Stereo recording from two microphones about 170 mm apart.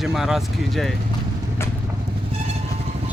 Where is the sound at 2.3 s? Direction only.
35° right (ahead or behind).